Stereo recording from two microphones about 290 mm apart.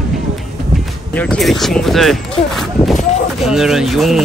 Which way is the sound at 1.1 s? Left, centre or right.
Centre.